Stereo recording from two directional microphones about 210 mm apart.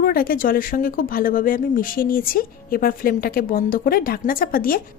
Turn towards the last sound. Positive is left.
turn(degrees=40)  # may be behind; listen again after turning